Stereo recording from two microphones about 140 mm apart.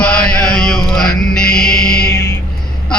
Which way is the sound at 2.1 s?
20° left (ahead or behind).